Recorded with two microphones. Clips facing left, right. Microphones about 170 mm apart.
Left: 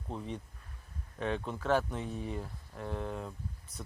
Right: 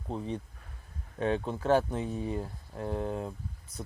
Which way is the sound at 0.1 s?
30° right (ahead or behind).